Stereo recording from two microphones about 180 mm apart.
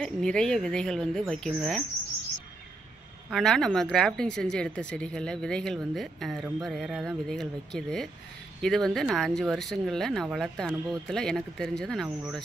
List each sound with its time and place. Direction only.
0.0 s speech: 5° left (ahead or behind)
3.3 s speech: 5° left (ahead or behind)